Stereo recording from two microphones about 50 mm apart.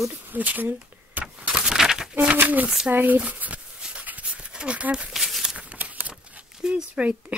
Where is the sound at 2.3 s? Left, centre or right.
Right.